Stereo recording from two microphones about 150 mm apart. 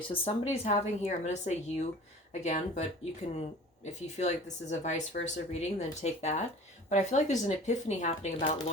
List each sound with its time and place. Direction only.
0.1 s speech: 45° left (ahead or behind)
8.4 s speech: 35° left (ahead or behind)